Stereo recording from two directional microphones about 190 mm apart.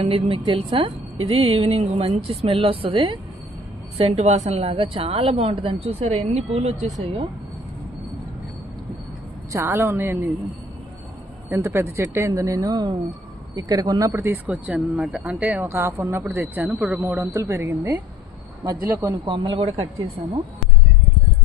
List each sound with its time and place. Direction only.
0.0 s a woman's voice: 30° right (ahead or behind)
9.5 s speech: 15° right (ahead or behind)
11.4 s a woman's voice: 15° right (ahead or behind); by 19.9 s 30° right (ahead or behind)